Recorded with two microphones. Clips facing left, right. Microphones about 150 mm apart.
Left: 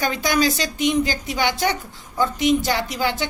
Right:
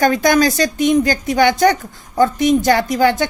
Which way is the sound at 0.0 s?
50° right (ahead or behind).